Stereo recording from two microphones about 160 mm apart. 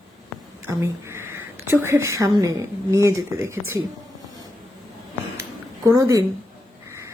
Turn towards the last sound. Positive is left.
turn(degrees=-20)  # may be behind; listen again after turning